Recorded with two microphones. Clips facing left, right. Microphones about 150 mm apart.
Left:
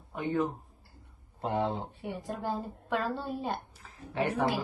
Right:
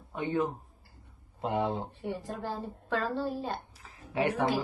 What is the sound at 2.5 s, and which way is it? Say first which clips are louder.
A woman's voice: left 1 dB; centre (ahead or behind).